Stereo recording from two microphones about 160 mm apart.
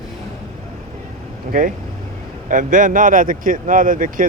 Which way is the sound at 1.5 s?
60° right (ahead or behind).